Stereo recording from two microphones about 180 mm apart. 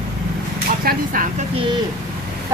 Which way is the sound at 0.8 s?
50° right (ahead or behind).